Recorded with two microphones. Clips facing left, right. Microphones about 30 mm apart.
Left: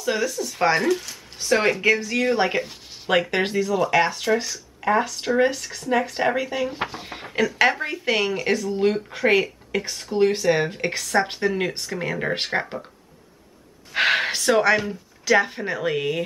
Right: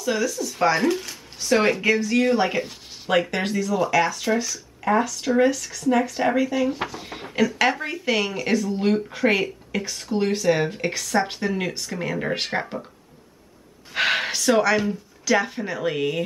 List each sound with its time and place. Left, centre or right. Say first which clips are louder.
0.0 s speech: even; centre
13.9 s speech: left 2 dB; centre